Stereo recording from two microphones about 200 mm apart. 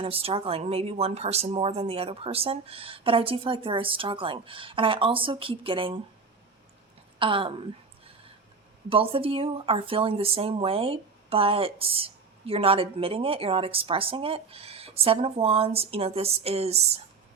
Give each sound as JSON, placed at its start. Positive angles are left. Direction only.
{"t": 0.0, "sound": "speech", "side_deg": -30}
{"t": 7.2, "sound": "speech", "side_deg": -25}
{"t": 8.9, "sound": "speech", "side_deg": -30}